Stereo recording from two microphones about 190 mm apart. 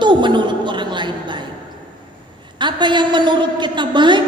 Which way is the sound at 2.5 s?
25° right (ahead or behind).